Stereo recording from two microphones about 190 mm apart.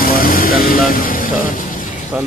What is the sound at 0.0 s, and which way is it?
Vehicle, 50° left (ahead or behind).